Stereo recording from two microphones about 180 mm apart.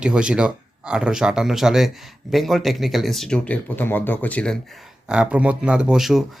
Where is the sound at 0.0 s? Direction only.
5° right (ahead or behind).